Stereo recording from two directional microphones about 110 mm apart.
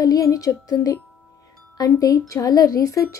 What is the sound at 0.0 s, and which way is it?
A woman's voice, 35° left (ahead or behind).